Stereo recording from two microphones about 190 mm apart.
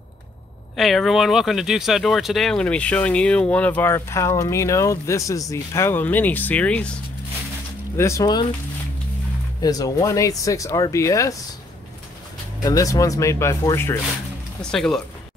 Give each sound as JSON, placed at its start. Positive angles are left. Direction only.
{"t": 0.7, "sound": "speech", "side_deg": 0}
{"t": 8.0, "sound": "speech", "side_deg": 15}
{"t": 9.6, "sound": "speech", "side_deg": 20}
{"t": 12.6, "sound": "speech", "side_deg": 20}
{"t": 14.6, "sound": "speech", "side_deg": 5}